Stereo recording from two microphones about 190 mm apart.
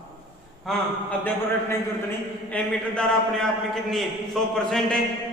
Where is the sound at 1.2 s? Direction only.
10° left (ahead or behind).